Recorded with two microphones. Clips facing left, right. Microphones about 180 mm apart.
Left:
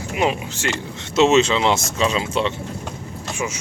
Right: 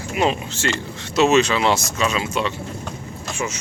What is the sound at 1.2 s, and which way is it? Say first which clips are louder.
Speech: even; 25° left (ahead or behind).